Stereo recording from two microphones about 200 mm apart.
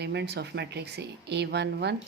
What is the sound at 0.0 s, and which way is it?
Speech, 55° right (ahead or behind).